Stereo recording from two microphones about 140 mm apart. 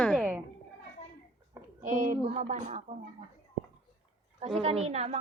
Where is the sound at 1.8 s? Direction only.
70° right (ahead or behind).